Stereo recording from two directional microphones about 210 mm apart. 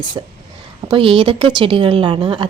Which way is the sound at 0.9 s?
25° right (ahead or behind).